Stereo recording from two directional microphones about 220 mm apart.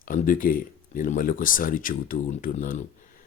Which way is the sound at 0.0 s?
40° left (ahead or behind).